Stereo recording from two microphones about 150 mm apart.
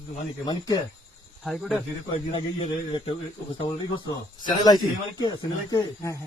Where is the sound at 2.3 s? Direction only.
35° left (ahead or behind).